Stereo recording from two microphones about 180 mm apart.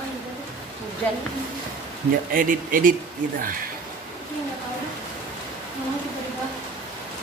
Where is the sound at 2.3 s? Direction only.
50° right (ahead or behind).